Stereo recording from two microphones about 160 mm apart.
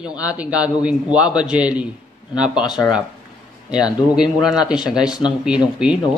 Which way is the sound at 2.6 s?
25° left (ahead or behind).